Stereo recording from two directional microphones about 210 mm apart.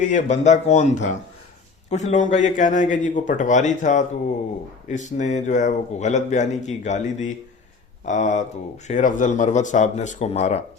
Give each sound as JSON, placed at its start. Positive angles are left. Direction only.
{"t": 0.0, "sound": "a man's voice", "side_deg": 35}